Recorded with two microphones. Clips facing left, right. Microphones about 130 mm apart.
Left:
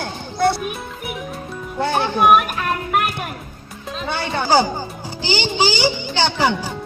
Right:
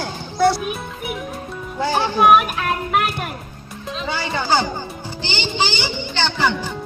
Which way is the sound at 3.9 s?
60° left (ahead or behind).